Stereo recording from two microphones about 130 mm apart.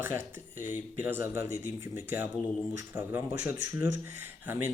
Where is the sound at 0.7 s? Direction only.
15° right (ahead or behind).